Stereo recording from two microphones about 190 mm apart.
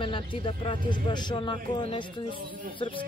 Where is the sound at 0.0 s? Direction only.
25° left (ahead or behind).